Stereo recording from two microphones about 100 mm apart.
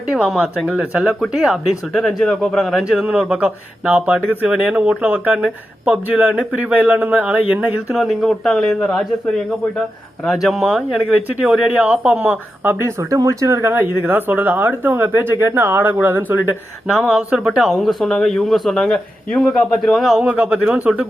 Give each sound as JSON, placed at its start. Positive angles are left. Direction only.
{"t": 0.1, "sound": "speech", "side_deg": -5}
{"t": 7.9, "sound": "speech", "side_deg": 0}
{"t": 10.2, "sound": "speech", "side_deg": 0}
{"t": 13.0, "sound": "speech", "side_deg": -30}
{"t": 16.8, "sound": "speech", "side_deg": -5}
{"t": 20.2, "sound": "speech", "side_deg": -15}